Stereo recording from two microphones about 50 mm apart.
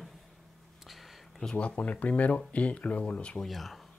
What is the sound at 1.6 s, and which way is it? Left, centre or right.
Speech, left.